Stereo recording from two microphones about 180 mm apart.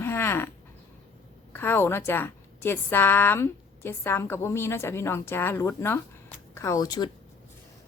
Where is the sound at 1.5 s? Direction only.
10° left (ahead or behind).